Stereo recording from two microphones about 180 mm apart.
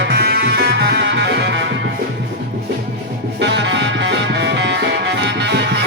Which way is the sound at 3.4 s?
75° right (ahead or behind).